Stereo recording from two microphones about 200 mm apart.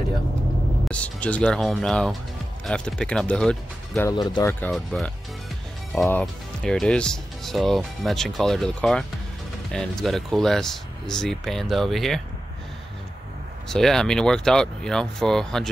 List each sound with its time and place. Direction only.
0.8 s speech: 5° left (ahead or behind)
4.1 s speech: 20° left (ahead or behind)
4.6 s speech: centre (ahead or behind)
6.2 s speech: centre (ahead or behind)
13.7 s speech: centre (ahead or behind)